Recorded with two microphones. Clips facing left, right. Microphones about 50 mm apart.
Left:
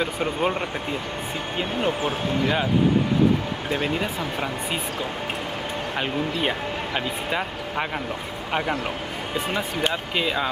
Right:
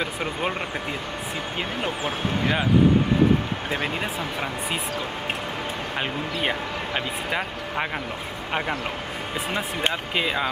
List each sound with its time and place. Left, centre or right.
0.2 s speech: centre
2.0 s speech: right
3.7 s speech: right
7.3 s speech: centre
9.5 s speech: right
10.1 s speech: centre